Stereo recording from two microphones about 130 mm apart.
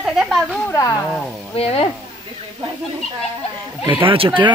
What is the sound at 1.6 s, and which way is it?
Speech, 45° left (ahead or behind).